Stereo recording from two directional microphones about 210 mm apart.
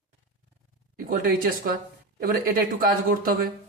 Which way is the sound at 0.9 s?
45° right (ahead or behind).